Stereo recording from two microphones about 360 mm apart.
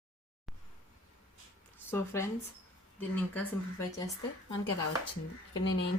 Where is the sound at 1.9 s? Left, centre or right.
Centre.